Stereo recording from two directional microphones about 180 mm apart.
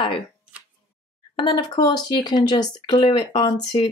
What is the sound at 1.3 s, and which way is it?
Speech, 25° left (ahead or behind).